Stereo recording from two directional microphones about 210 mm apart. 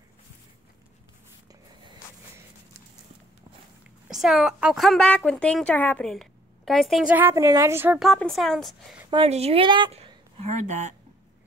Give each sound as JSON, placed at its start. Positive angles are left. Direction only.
{"t": 4.1, "sound": "a woman's voice", "side_deg": 0}
{"t": 9.1, "sound": "a woman's voice", "side_deg": -30}